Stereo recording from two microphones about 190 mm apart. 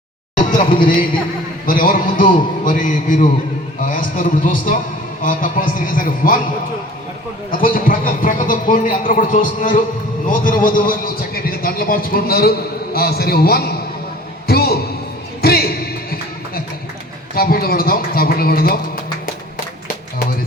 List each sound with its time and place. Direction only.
0.3 s a man's voice: 45° left (ahead or behind)
7.5 s a man's voice: 45° left (ahead or behind)
14.4 s a sound: 55° left (ahead or behind)
15.4 s music: 55° left (ahead or behind)
17.3 s a man's voice: 50° left (ahead or behind)